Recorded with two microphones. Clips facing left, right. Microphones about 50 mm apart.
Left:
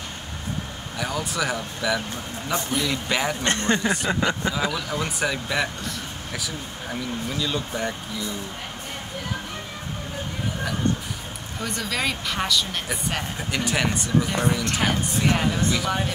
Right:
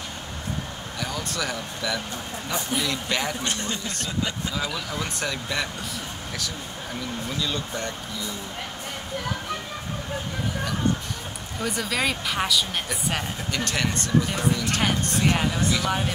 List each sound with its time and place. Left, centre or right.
0.9 s speech: centre
3.4 s speech: left
4.6 s speech: centre
7.3 s speech: centre
11.6 s a woman's voice: centre
12.8 s a woman's voice: centre